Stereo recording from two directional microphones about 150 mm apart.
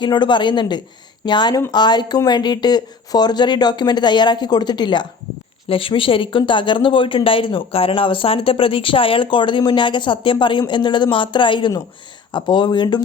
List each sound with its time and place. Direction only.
0.0 s speech: 30° left (ahead or behind)